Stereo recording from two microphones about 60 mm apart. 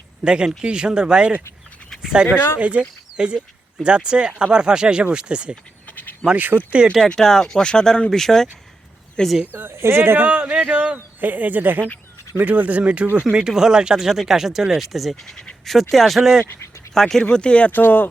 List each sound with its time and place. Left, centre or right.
0.3 s speech: centre
2.0 s dog: centre
2.6 s speech: right
6.2 s speech: right
7.0 s speech: centre
9.5 s speech: right
10.2 s speech: right
10.9 s speech: right
13.3 s speech: centre
17.7 s speech: left